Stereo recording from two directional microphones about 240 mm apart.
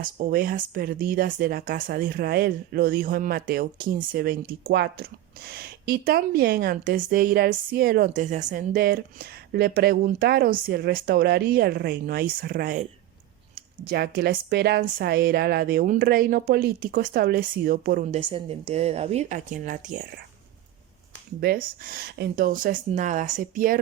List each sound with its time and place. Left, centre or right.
0.0 s a woman's voice: right
18.2 s speech: right
21.4 s a woman's voice: right